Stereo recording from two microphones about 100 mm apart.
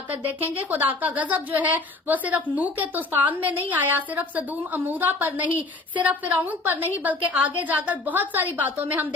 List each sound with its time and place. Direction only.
0.1 s a woman's voice: 15° right (ahead or behind)